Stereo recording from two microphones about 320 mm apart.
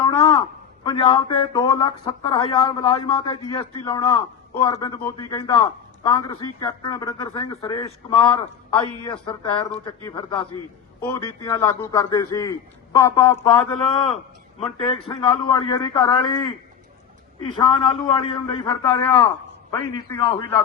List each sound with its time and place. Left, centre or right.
0.0 s a sound: centre
0.9 s speech: centre
14.6 s speech: centre
17.6 s speech: centre